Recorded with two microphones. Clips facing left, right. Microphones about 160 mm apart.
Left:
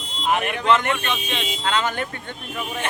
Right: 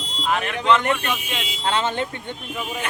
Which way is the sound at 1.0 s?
10° right (ahead or behind).